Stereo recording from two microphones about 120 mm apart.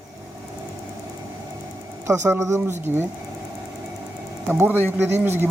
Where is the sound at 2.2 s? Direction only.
25° right (ahead or behind).